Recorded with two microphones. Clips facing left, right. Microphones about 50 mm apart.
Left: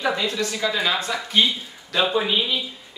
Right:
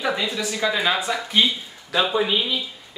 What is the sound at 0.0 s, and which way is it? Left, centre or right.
Speech, centre.